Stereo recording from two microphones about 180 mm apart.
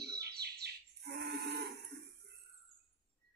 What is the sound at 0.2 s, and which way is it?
Chirp, 65° right (ahead or behind).